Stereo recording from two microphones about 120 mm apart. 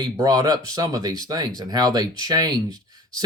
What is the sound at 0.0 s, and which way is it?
Speech, 35° right (ahead or behind).